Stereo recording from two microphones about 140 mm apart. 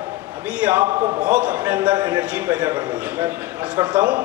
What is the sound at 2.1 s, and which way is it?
Speech, 15° right (ahead or behind).